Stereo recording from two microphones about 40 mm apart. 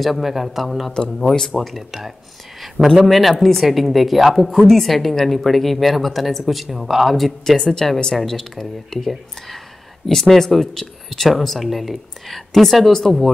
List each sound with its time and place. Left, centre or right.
0.0 s speech: centre
0.9 s speech: centre
1.6 s speech: centre
7.4 s speech: centre